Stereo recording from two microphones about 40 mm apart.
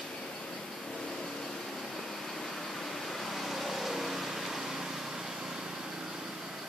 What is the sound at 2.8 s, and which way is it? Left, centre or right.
Vehicle, centre.